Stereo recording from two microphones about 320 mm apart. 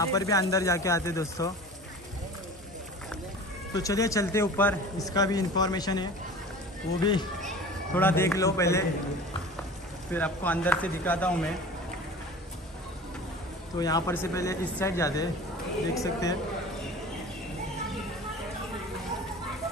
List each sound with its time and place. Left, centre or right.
0.0 s speech: centre
3.7 s speech: centre
10.1 s speech: centre
13.7 s speech: centre